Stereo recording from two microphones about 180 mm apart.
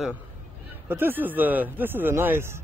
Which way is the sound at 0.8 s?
10° right (ahead or behind).